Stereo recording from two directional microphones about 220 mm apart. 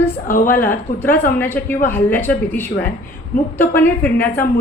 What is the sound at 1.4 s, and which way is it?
A woman's voice, 10° left (ahead or behind).